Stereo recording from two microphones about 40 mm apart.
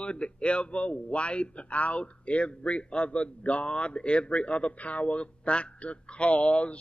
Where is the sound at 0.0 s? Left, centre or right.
Left.